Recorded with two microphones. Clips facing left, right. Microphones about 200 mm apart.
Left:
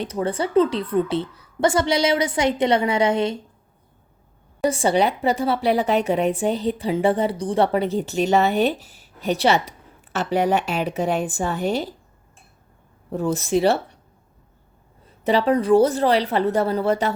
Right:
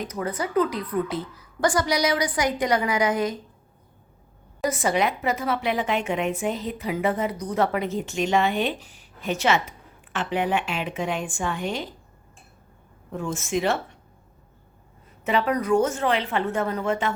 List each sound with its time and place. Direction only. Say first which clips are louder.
0.0 s a woman's voice: left 5 dB; 30° left (ahead or behind)
4.6 s a woman's voice: left 4 dB; 30° left (ahead or behind)
13.1 s a woman's voice: left 6 dB; 35° left (ahead or behind)
15.2 s a woman's voice: left 5 dB; 35° left (ahead or behind)